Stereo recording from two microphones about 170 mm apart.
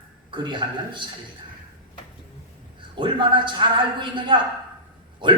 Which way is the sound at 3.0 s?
30° right (ahead or behind).